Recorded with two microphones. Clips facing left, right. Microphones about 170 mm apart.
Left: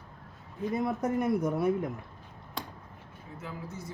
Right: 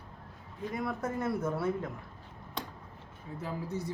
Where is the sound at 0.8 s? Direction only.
20° left (ahead or behind).